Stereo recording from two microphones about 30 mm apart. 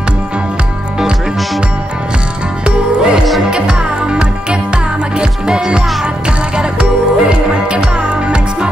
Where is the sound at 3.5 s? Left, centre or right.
Right.